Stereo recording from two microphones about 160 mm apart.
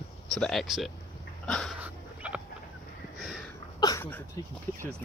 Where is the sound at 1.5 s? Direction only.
5° left (ahead or behind).